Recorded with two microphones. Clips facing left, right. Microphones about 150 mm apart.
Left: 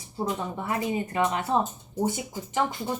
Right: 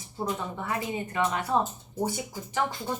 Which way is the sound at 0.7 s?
20° left (ahead or behind).